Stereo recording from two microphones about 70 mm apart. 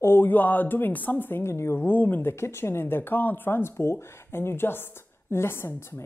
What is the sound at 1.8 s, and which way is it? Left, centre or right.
Speech, left.